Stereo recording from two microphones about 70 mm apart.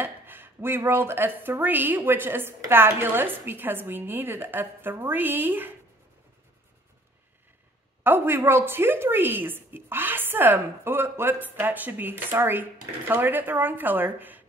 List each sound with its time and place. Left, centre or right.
0.0 s a woman's voice: right
8.0 s a woman's voice: right